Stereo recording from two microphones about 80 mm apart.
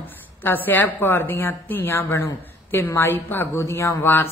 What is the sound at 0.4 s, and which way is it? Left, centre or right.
A woman's voice, left.